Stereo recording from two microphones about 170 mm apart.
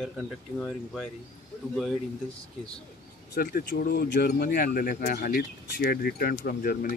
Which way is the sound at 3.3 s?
65° left (ahead or behind).